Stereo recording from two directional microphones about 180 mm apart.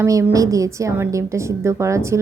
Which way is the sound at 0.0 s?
15° right (ahead or behind).